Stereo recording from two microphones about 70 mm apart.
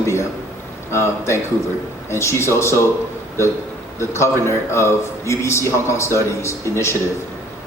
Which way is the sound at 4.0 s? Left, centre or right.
Left.